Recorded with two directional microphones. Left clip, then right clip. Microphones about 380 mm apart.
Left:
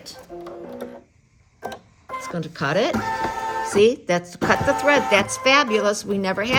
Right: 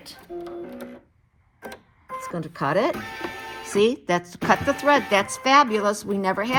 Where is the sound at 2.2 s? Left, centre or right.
Centre.